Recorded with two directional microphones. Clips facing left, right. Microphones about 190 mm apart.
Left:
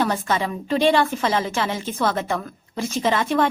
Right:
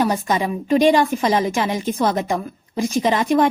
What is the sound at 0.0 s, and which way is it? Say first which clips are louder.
A woman's voice: right 3 dB; 15° right (ahead or behind).